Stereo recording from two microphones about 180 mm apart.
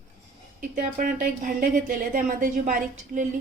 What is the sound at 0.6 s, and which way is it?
Speech, 50° right (ahead or behind).